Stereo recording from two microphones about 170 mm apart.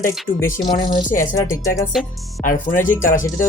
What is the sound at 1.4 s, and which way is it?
Speech, 20° left (ahead or behind).